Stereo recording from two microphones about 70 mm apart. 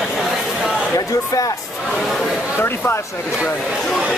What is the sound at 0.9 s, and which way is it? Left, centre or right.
Speech, left.